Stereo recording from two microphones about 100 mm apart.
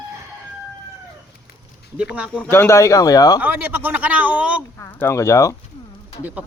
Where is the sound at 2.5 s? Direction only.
25° left (ahead or behind).